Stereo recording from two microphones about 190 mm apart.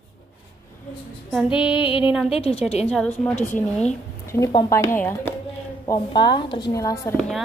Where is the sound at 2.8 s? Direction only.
5° left (ahead or behind).